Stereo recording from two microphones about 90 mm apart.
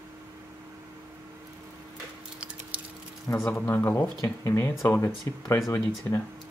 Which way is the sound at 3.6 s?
25° left (ahead or behind).